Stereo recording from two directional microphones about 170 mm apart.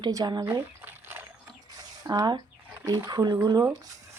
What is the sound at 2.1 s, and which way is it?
Speech, 25° right (ahead or behind).